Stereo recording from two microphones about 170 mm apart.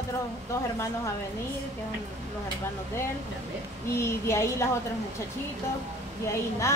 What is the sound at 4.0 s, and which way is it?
Speech, 15° left (ahead or behind).